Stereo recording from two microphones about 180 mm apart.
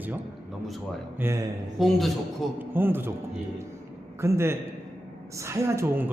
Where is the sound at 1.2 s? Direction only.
15° right (ahead or behind).